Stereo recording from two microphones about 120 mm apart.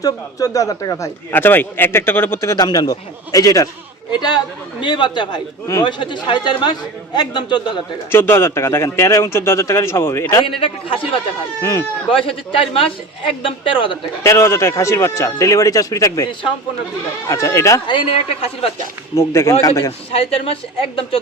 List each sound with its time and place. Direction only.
0.0 s a man's voice: 30° left (ahead or behind)
1.4 s a man's voice: 15° left (ahead or behind); by 7.8 s 40° left (ahead or behind)
8.1 s a man's voice: 20° left (ahead or behind)
10.6 s a man's voice: 45° left (ahead or behind)
11.6 s a man's voice: 25° left (ahead or behind)
12.1 s a man's voice: 50° left (ahead or behind)
14.3 s a man's voice: 25° left (ahead or behind)
17.8 s a man's voice: 45° left (ahead or behind)
19.1 s a man's voice: 25° left (ahead or behind)
20.1 s a man's voice: 55° left (ahead or behind)